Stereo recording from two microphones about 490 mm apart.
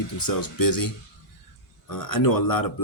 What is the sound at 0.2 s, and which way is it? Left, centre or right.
Speech, left.